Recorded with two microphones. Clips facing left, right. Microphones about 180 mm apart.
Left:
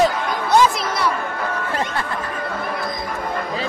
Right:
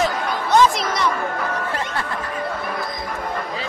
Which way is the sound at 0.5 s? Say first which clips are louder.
Even; 10° left (ahead or behind).